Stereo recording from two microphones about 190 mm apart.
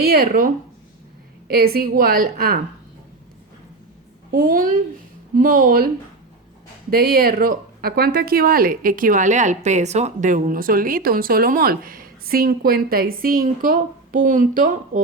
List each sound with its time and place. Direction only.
0.0 s speech: 55° right (ahead or behind)
4.3 s speech: 50° right (ahead or behind)
6.9 s speech: 50° right (ahead or behind)